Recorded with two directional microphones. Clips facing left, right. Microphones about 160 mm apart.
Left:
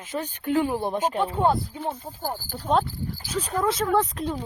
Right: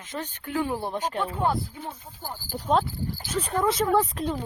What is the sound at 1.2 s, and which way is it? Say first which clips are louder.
Speech: left 3 dB; 25° left (ahead or behind).